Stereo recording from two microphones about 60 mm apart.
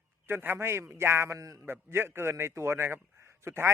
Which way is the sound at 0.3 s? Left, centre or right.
Right.